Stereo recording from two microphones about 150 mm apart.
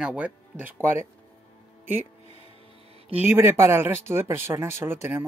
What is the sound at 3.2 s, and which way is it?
Speech, 15° right (ahead or behind).